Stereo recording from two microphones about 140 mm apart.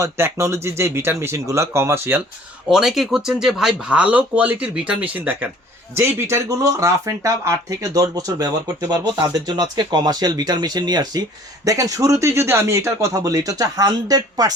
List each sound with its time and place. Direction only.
0.0 s speech: 20° right (ahead or behind)
2.6 s speech: centre (ahead or behind); by 14.5 s 25° right (ahead or behind)